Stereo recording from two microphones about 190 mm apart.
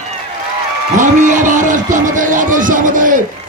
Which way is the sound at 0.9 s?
40° right (ahead or behind).